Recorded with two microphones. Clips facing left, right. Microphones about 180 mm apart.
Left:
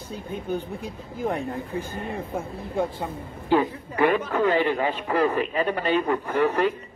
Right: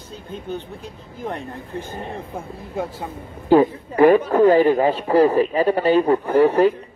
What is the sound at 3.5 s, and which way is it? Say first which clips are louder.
A man's voice: right 7 dB; 40° right (ahead or behind).